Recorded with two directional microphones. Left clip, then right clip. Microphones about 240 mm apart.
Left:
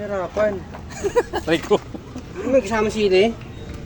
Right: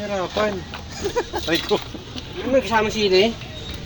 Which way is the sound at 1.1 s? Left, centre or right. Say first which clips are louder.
Left 3 dB; left.